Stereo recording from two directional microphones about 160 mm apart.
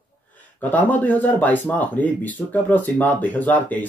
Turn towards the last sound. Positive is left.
turn(degrees=10)  # may be behind; listen again after turning